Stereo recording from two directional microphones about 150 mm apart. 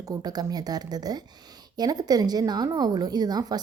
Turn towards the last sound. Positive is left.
turn(degrees=-25)  # may be behind; listen again after turning